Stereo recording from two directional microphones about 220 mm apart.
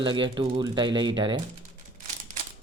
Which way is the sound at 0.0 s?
20° right (ahead or behind).